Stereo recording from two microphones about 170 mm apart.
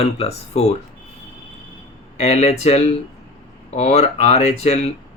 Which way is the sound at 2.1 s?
40° left (ahead or behind).